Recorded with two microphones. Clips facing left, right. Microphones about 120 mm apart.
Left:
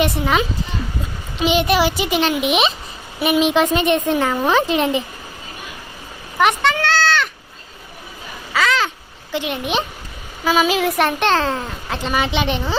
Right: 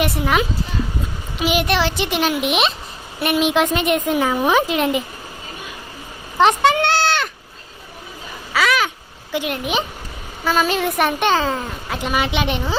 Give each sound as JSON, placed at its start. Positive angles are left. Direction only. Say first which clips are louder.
{"t": 0.0, "sound": "a woman's voice", "louder": "left 1 dB", "side_deg": -5}
{"t": 6.4, "sound": "speech", "louder": "right 2 dB", "side_deg": -35}
{"t": 6.8, "sound": "goat", "louder": "even", "side_deg": -20}
{"t": 8.5, "sound": "a sound", "louder": "even", "side_deg": -10}
{"t": 9.3, "sound": "a woman's voice", "louder": "even", "side_deg": -5}